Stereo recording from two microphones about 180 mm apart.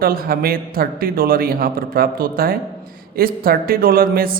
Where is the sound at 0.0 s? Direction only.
55° right (ahead or behind).